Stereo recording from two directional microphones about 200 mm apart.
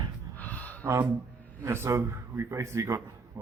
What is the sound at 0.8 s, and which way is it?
Speech, 15° right (ahead or behind).